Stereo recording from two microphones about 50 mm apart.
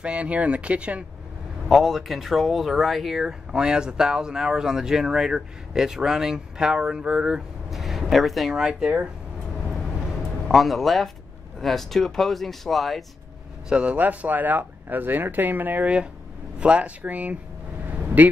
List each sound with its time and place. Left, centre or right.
0.0 s speech: right
1.7 s speech: centre
7.7 s speech: centre
10.5 s speech: centre
13.7 s speech: right
13.9 s speech: right
16.5 s speech: right
17.8 s vehicle: right